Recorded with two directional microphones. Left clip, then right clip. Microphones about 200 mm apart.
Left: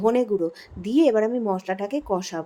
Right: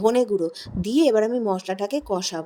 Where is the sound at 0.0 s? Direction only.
35° right (ahead or behind).